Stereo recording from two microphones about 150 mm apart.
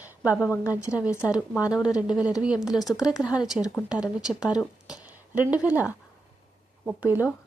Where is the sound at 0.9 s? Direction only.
10° right (ahead or behind).